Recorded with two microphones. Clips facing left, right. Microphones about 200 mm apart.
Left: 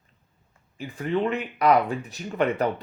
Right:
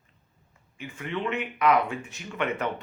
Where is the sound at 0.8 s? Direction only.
35° left (ahead or behind).